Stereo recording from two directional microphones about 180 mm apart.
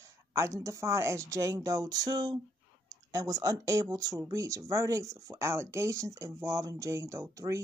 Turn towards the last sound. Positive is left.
turn(degrees=-15)  # may be behind; listen again after turning